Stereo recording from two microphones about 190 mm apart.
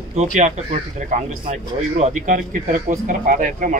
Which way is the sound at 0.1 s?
35° right (ahead or behind).